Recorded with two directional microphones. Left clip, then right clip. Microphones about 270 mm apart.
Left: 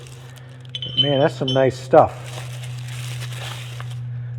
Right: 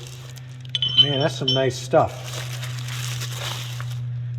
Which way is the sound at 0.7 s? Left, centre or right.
Centre.